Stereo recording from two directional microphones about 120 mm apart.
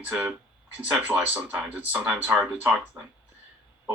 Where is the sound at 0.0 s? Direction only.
15° right (ahead or behind).